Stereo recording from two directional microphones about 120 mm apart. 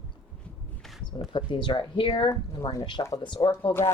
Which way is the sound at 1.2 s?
45° left (ahead or behind).